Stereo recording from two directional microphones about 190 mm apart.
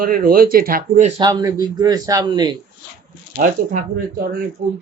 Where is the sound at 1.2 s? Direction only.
20° right (ahead or behind).